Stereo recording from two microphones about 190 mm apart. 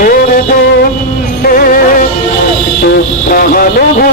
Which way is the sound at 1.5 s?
50° left (ahead or behind).